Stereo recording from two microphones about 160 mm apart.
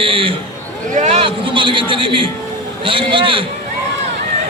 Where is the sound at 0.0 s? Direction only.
35° right (ahead or behind).